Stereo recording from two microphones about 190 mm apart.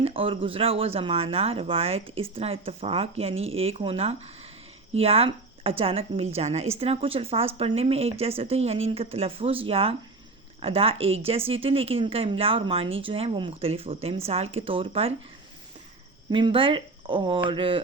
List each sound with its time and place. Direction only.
0.0 s speech: 30° right (ahead or behind)
16.3 s speech: 25° right (ahead or behind)